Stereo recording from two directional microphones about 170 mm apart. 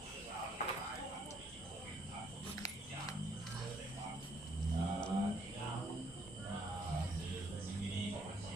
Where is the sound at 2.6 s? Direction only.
20° left (ahead or behind).